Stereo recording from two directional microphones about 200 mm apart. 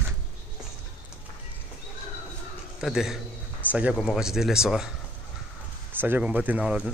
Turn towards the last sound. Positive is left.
turn(degrees=-5)  # may be behind; listen again after turning